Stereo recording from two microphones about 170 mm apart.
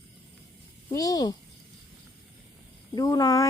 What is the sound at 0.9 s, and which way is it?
Speech, 20° left (ahead or behind).